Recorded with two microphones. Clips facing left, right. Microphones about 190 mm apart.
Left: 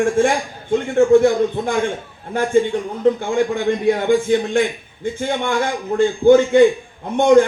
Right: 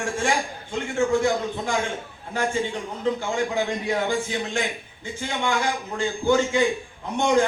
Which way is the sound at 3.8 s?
55° left (ahead or behind).